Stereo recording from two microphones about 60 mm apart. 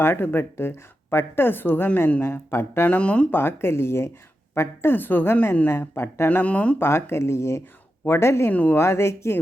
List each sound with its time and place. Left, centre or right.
0.0 s a woman's voice: left
2.8 s speech: left
3.3 s a woman's voice: left
6.7 s speech: left
8.4 s speech: left
8.7 s speech: left